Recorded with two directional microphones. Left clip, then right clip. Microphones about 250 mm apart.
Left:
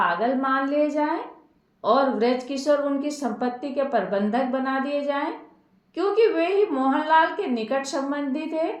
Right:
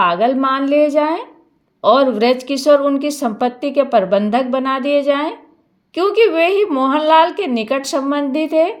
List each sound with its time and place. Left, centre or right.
0.0 s a woman's voice: right